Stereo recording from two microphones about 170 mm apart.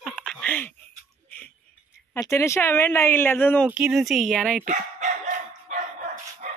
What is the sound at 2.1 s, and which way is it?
Speech, 15° left (ahead or behind).